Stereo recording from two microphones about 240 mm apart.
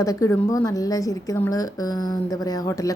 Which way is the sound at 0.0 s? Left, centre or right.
Centre.